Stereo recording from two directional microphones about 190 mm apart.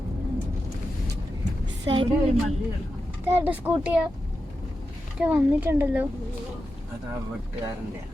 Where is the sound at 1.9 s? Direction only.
25° right (ahead or behind).